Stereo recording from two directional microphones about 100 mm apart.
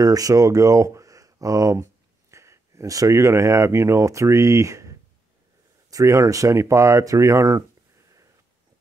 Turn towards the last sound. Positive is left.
turn(degrees=-35)  # may be behind; listen again after turning